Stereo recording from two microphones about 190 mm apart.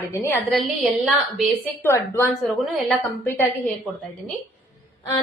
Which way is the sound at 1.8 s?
15° left (ahead or behind).